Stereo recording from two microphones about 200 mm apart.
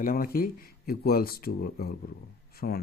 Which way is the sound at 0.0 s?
45° left (ahead or behind).